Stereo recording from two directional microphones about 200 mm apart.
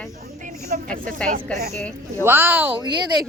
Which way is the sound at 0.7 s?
45° right (ahead or behind).